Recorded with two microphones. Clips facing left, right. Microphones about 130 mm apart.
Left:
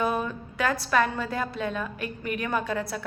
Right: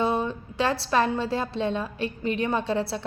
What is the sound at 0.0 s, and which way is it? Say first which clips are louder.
A woman's voice: right 2 dB; 25° right (ahead or behind).